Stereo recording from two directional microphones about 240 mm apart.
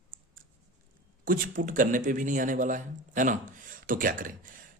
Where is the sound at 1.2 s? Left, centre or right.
Right.